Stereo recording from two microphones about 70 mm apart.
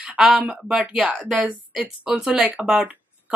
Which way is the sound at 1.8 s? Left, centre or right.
Centre.